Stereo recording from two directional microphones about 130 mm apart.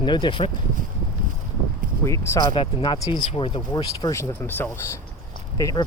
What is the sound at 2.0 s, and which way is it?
Speech, 25° left (ahead or behind).